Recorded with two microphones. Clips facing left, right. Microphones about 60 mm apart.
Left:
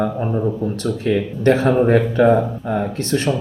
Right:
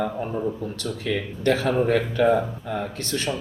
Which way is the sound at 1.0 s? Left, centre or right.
Left.